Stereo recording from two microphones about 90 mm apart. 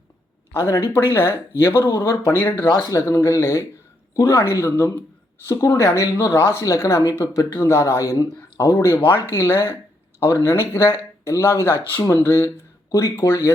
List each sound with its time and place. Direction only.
0.5 s speech: 30° left (ahead or behind)
2.3 s speech: 20° left (ahead or behind)
2.9 s speech: 35° left (ahead or behind)